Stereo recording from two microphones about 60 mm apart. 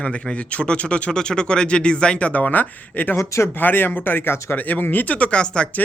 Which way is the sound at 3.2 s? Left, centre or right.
Left.